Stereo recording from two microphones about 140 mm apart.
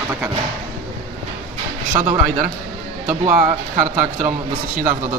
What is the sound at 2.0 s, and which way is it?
Speech, 45° right (ahead or behind).